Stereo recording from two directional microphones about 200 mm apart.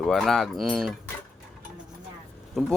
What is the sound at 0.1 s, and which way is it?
Speech, centre (ahead or behind).